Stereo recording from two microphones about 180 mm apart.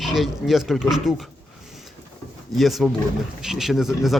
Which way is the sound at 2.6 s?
Centre (ahead or behind).